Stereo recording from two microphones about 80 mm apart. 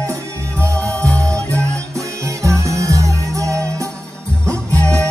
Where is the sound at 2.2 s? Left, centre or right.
Right.